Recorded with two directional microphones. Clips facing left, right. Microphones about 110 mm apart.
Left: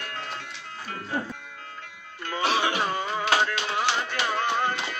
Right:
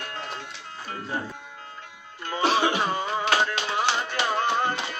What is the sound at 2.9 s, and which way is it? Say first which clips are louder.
Music: right 1 dB; 25° right (ahead or behind).